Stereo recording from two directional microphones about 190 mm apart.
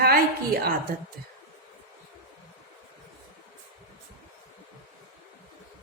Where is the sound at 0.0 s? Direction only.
55° right (ahead or behind).